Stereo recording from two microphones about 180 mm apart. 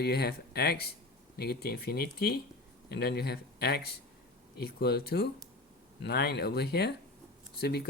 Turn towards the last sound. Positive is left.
turn(degrees=65)  # may be behind; listen again after turning